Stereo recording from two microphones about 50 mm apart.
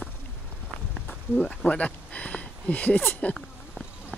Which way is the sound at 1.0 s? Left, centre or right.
Left.